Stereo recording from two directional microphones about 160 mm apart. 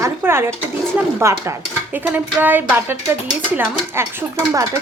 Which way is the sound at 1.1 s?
20° right (ahead or behind).